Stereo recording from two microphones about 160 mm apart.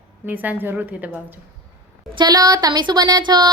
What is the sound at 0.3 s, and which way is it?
Speech, 10° right (ahead or behind).